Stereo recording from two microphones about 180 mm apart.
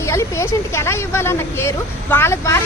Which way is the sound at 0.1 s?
15° left (ahead or behind).